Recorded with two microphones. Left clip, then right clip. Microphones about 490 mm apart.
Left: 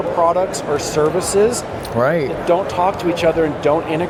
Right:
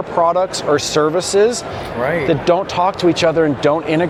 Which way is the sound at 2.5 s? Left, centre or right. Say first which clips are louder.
Left 1 dB; right.